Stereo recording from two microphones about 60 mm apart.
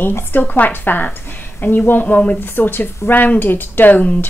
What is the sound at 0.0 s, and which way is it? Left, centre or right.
Speech, left.